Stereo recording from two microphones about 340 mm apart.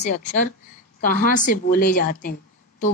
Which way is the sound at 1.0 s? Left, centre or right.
Left.